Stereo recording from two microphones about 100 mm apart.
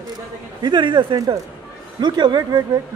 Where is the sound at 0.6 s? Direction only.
50° right (ahead or behind).